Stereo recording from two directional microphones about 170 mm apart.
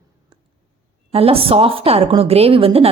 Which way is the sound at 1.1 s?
35° right (ahead or behind).